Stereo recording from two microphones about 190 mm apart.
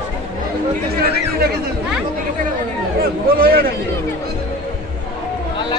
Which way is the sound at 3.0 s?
50° right (ahead or behind).